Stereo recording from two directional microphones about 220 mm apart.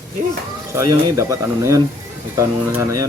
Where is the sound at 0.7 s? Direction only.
15° right (ahead or behind).